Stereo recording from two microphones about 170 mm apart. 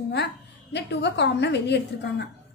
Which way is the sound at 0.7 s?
90° left.